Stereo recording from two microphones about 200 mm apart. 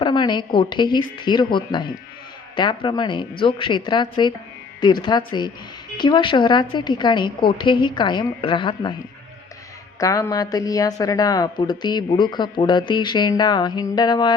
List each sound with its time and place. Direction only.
0.0 s speech: 25° left (ahead or behind)
10.0 s speech: 15° left (ahead or behind)